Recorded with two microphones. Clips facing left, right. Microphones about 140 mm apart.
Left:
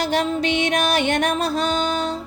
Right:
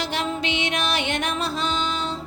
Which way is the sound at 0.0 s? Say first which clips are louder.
Left 6 dB; 45° left (ahead or behind).